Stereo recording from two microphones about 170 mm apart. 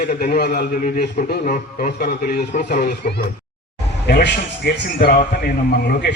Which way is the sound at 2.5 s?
50° left (ahead or behind).